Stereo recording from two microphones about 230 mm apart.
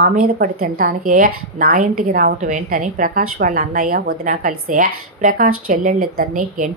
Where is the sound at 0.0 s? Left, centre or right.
Right.